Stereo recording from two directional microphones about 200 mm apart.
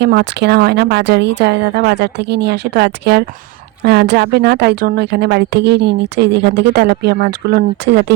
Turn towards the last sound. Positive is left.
turn(degrees=-55)  # may be behind; listen again after turning